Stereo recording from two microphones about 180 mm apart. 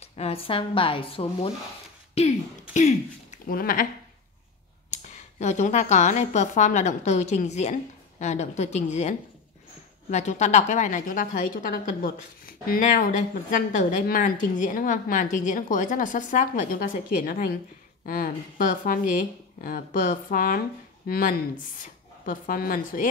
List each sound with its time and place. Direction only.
0.0 s speech: 35° left (ahead or behind); by 3.8 s 50° left (ahead or behind)
4.9 s speech: 40° left (ahead or behind)
10.1 s a woman's voice: 40° left (ahead or behind)